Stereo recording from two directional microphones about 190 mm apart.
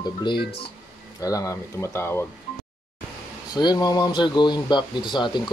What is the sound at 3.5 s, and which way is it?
Speech, 20° left (ahead or behind).